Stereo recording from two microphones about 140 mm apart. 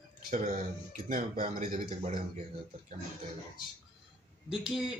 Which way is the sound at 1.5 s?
70° right (ahead or behind).